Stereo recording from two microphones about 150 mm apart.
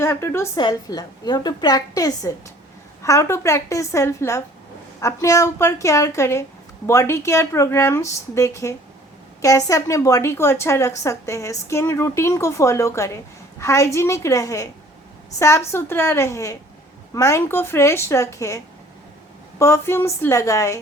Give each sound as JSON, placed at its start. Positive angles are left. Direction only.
{"t": 0.0, "sound": "a woman's voice", "side_deg": 20}